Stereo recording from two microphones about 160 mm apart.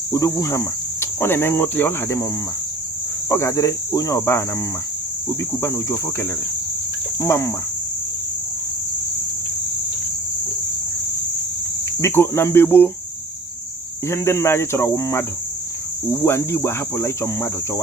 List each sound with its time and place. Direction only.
0.1 s cricket: 20° left (ahead or behind)
5.5 s cricket: 15° left (ahead or behind)
11.9 s cricket: 15° left (ahead or behind)
14.1 s cricket: 15° left (ahead or behind)